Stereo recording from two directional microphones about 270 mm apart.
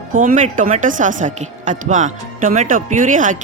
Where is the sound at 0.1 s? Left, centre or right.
Right.